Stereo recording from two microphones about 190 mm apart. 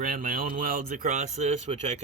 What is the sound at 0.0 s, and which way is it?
Speech, 50° right (ahead or behind).